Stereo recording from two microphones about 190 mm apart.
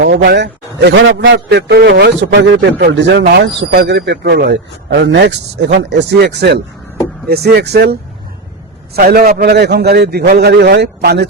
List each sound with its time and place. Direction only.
0.2 s a man's voice: 65° right (ahead or behind)
9.0 s a man's voice: 50° right (ahead or behind)